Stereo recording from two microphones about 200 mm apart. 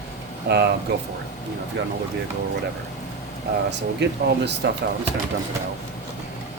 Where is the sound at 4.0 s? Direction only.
60° right (ahead or behind).